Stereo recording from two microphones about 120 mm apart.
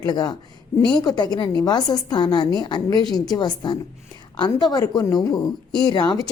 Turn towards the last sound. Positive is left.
turn(degrees=35)  # may be behind; listen again after turning